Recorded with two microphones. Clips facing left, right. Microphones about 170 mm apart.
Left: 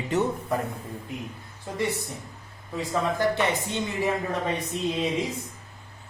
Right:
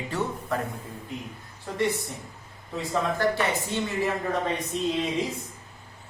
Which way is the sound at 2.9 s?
15° left (ahead or behind).